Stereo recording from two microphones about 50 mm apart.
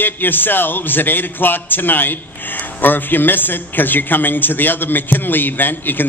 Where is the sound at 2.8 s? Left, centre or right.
Left.